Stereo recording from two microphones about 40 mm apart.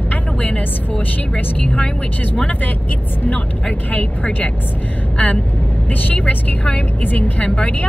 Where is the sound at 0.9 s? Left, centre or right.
Left.